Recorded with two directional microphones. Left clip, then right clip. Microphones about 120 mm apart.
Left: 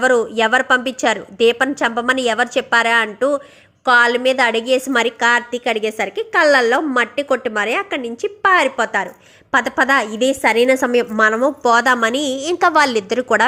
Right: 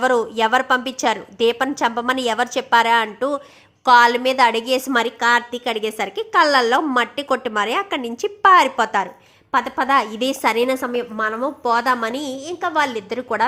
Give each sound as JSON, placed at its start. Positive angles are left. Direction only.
{"t": 0.0, "sound": "a woman's voice", "side_deg": 0}
{"t": 9.5, "sound": "a woman's voice", "side_deg": 15}
{"t": 9.9, "sound": "a woman's voice", "side_deg": 0}
{"t": 10.7, "sound": "a woman's voice", "side_deg": 20}
{"t": 11.9, "sound": "a woman's voice", "side_deg": 15}
{"t": 12.5, "sound": "a woman's voice", "side_deg": 40}